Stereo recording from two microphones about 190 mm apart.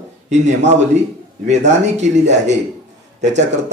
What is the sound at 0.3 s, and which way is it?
A man's voice, 35° right (ahead or behind).